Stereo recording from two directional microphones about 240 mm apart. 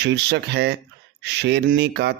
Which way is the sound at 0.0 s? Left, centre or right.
Right.